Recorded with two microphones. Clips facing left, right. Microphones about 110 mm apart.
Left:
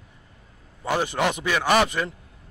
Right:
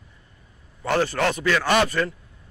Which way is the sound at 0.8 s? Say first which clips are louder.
Right 2 dB; 15° left (ahead or behind).